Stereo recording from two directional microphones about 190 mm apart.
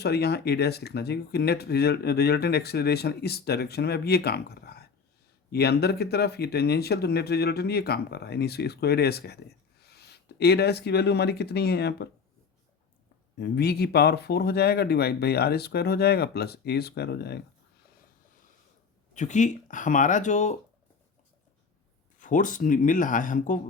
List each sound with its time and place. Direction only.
0.0 s speech: 60° left (ahead or behind)
13.4 s speech: 60° left (ahead or behind)
19.1 s speech: 40° left (ahead or behind)
22.2 s speech: 45° left (ahead or behind)